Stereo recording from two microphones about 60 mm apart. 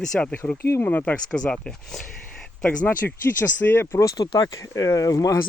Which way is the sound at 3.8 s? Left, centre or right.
Left.